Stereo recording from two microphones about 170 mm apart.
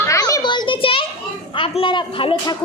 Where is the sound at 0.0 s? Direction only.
20° left (ahead or behind).